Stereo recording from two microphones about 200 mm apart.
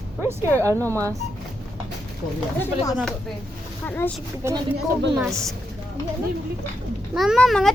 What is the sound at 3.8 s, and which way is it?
Speech, 10° left (ahead or behind).